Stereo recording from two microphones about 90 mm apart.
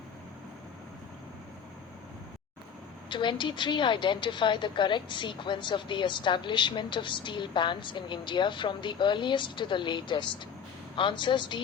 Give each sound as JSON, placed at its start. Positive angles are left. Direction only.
{"t": 3.1, "sound": "a woman's voice", "side_deg": 60}